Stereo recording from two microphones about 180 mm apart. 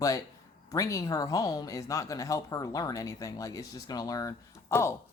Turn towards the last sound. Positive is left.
turn(degrees=15)  # may be behind; listen again after turning